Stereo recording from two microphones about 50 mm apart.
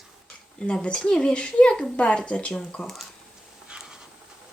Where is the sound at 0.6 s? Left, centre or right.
Left.